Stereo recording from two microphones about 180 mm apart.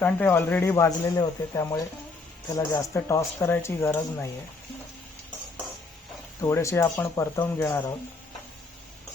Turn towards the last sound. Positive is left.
turn(degrees=15)  # may be behind; listen again after turning